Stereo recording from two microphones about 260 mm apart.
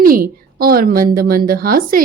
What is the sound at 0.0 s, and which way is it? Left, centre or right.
A woman's voice, right.